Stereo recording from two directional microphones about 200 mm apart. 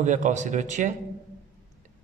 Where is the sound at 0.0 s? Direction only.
40° right (ahead or behind).